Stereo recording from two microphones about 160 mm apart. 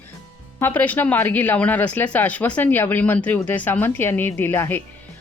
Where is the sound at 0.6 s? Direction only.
15° left (ahead or behind).